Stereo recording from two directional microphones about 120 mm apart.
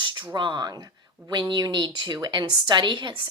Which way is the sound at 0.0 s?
40° right (ahead or behind).